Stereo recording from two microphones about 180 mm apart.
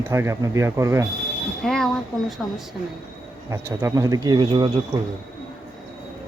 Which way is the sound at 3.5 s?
15° right (ahead or behind).